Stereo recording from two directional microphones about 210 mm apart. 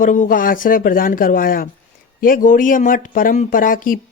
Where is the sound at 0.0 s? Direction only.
40° left (ahead or behind).